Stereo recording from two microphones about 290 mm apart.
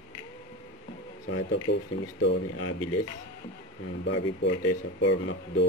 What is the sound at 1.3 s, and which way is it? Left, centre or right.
Speech, left.